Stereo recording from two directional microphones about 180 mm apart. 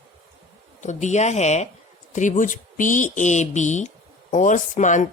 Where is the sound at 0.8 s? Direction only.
40° left (ahead or behind).